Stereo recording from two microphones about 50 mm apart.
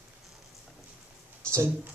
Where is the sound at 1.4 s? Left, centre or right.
Right.